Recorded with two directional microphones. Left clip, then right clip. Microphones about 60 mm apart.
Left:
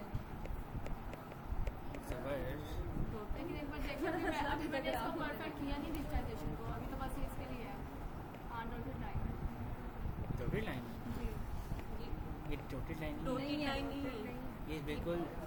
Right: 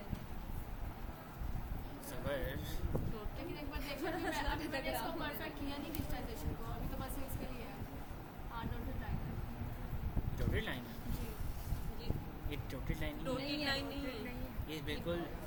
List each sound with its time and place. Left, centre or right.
2.2 s a sound: centre
3.5 s a woman's voice: left
10.5 s speech: centre
12.5 s a woman's voice: centre